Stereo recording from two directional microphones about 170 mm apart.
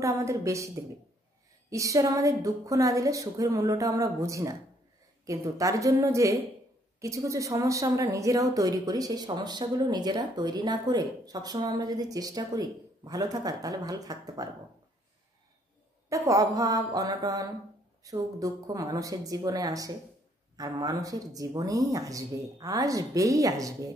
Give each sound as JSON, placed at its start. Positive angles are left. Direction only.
{"t": 0.0, "sound": "a woman's voice", "side_deg": -20}
{"t": 16.1, "sound": "a woman's voice", "side_deg": -20}